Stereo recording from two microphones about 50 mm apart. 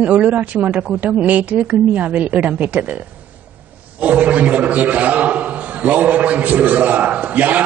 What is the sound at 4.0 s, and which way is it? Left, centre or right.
A man's voice, right.